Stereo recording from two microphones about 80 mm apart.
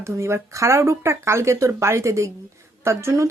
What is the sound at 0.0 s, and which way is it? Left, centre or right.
Speech, right.